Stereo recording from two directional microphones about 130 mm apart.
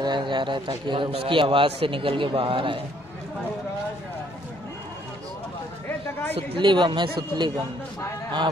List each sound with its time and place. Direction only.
0.0 s a man's voice: 35° right (ahead or behind)
6.3 s a man's voice: 40° right (ahead or behind)